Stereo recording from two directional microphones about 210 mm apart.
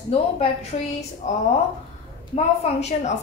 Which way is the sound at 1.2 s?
35° left (ahead or behind).